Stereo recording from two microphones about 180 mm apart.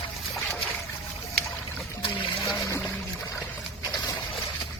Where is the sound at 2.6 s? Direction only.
10° left (ahead or behind).